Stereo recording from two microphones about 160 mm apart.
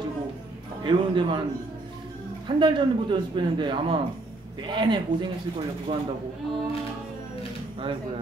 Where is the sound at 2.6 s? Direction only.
30° right (ahead or behind).